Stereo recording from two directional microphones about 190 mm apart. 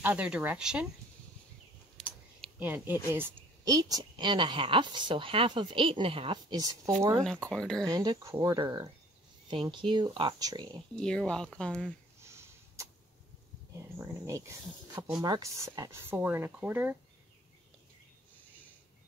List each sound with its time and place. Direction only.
0.0 s speech: 5° right (ahead or behind)
2.0 s a sound: 5° right (ahead or behind)
3.1 s a woman's voice: 10° right (ahead or behind)
7.2 s speech: 5° left (ahead or behind)
7.8 s a woman's voice: 20° right (ahead or behind)
11.0 s speech: 5° left (ahead or behind)
12.2 s sniff: 15° right (ahead or behind)
13.7 s speech: 15° right (ahead or behind)